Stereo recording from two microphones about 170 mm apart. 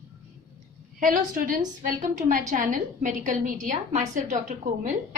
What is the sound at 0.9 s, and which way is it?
A woman's voice, 55° right (ahead or behind).